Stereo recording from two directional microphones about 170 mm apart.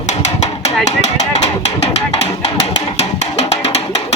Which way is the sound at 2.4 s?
40° left (ahead or behind).